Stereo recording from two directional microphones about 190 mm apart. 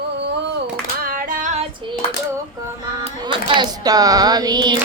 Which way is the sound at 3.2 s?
25° right (ahead or behind).